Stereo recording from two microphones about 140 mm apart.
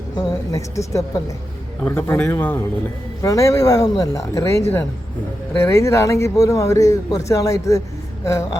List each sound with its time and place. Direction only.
0.5 s a man's voice: 20° left (ahead or behind)